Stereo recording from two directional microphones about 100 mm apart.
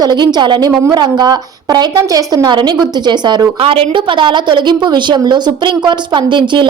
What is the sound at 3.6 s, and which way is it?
A woman's voice, 60° right (ahead or behind).